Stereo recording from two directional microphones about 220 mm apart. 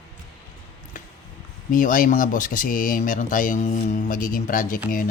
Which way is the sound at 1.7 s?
35° left (ahead or behind).